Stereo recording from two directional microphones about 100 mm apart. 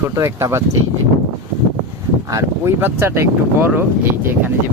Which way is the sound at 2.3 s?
25° right (ahead or behind).